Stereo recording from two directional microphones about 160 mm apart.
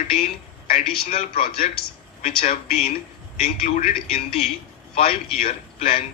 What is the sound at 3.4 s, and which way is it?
A man's voice, 40° left (ahead or behind).